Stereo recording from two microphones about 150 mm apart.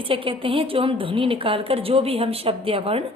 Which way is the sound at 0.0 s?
35° right (ahead or behind).